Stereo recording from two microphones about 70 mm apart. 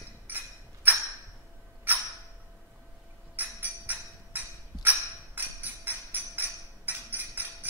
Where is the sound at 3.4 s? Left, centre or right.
Right.